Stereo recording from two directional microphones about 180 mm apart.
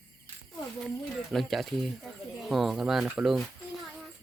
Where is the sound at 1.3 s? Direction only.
Centre (ahead or behind).